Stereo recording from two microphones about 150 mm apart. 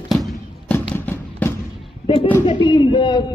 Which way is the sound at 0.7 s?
10° left (ahead or behind).